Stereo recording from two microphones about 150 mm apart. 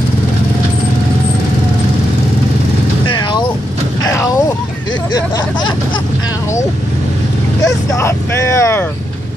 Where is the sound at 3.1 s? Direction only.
30° left (ahead or behind).